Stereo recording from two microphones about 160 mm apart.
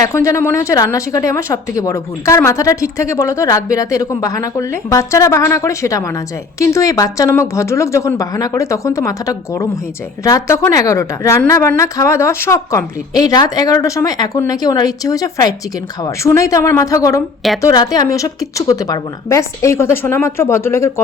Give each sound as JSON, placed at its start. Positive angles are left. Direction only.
{"t": 0.0, "sound": "speech", "side_deg": 20}